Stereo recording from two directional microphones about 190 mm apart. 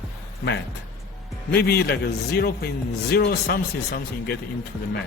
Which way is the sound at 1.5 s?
55° left (ahead or behind).